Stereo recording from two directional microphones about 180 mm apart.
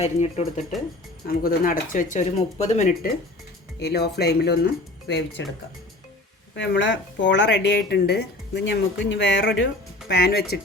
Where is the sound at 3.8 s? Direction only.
65° left (ahead or behind).